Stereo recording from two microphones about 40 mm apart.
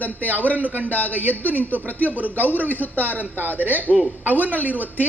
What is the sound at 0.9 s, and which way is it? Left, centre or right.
Speech, left.